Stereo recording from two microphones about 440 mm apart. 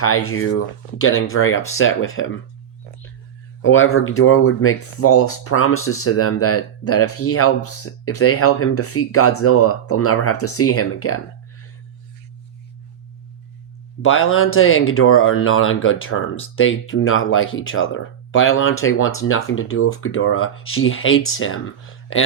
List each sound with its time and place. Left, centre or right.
0.0 s speech: left
3.6 s speech: left
14.0 s speech: left